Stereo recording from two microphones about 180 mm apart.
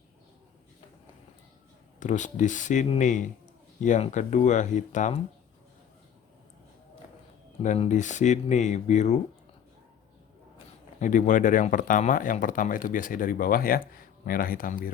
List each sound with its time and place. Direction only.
2.0 s speech: 45° left (ahead or behind)
7.6 s speech: 40° left (ahead or behind)
11.0 s speech: 45° left (ahead or behind)